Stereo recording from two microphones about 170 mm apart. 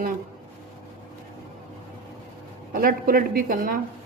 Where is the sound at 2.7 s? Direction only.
55° right (ahead or behind).